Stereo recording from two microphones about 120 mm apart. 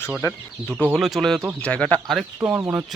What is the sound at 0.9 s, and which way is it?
Speech, centre (ahead or behind).